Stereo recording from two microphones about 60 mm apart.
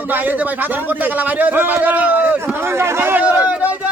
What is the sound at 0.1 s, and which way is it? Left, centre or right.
A man's voice, right.